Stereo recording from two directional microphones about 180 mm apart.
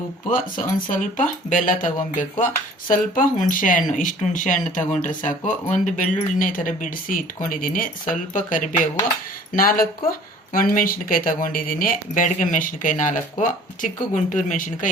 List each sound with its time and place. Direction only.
0.3 s speech: 50° left (ahead or behind)